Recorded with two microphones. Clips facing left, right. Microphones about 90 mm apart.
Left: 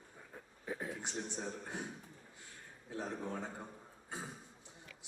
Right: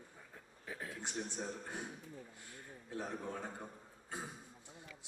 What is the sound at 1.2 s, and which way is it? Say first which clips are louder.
Speech: left 1 dB; 20° left (ahead or behind).